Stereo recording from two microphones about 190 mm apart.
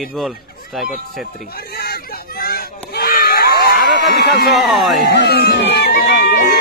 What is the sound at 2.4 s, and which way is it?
Crowd, 50° left (ahead or behind).